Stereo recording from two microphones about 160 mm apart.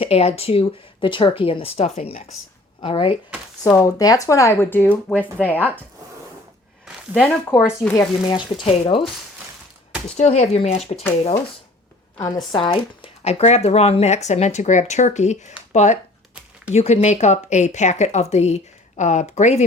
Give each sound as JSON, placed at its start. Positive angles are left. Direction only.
{"t": 0.0, "sound": "speech", "side_deg": 40}
{"t": 3.8, "sound": "speech", "side_deg": 20}
{"t": 7.2, "sound": "speech", "side_deg": 10}
{"t": 7.9, "sound": "speech", "side_deg": 30}
{"t": 10.2, "sound": "speech", "side_deg": 45}
{"t": 12.1, "sound": "speech", "side_deg": 25}